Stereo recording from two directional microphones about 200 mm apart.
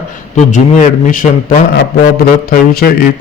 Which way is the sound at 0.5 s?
40° left (ahead or behind).